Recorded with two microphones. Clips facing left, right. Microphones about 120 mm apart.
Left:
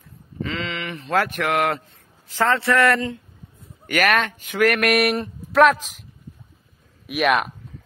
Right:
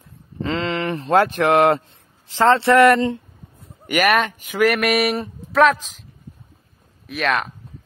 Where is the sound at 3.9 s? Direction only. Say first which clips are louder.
Right 2 dB; 10° right (ahead or behind).